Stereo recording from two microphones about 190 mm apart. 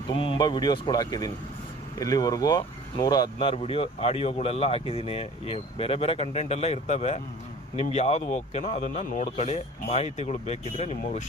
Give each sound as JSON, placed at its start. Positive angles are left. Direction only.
{"t": 0.1, "sound": "speech", "side_deg": 25}